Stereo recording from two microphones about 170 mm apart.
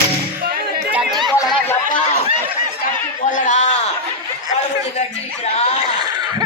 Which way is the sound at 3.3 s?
45° left (ahead or behind).